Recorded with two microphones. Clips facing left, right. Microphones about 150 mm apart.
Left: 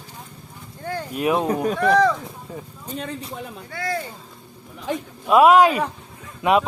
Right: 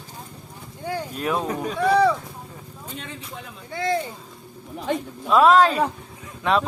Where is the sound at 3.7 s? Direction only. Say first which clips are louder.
Right 4 dB; 20° right (ahead or behind).